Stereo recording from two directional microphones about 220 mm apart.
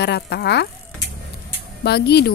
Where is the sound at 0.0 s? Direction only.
50° left (ahead or behind).